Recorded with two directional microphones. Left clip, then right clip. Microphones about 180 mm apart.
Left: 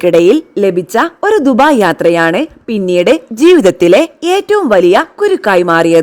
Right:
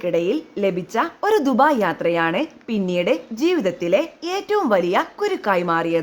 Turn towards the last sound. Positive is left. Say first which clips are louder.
# left 11 dB
turn(degrees=60)  # may be behind; listen again after turning